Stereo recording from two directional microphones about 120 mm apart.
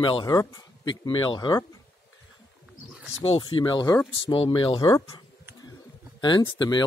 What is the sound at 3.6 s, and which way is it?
Speech, 35° left (ahead or behind).